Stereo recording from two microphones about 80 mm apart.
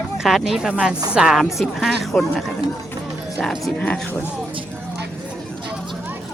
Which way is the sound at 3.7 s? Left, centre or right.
Centre.